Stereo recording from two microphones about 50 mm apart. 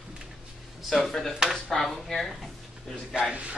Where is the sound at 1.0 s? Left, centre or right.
Centre.